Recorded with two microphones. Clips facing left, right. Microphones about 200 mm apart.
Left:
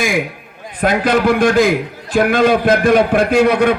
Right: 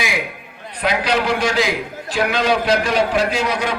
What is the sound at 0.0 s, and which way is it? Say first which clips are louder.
A man's voice: left 6 dB; 50° left (ahead or behind).